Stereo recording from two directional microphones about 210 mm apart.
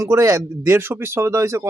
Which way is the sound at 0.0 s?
15° right (ahead or behind).